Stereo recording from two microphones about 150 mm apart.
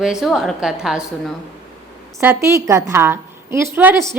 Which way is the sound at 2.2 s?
15° right (ahead or behind).